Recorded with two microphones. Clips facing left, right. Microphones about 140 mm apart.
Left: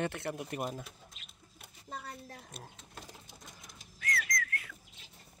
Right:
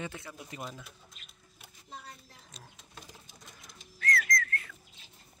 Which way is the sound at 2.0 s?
55° left (ahead or behind).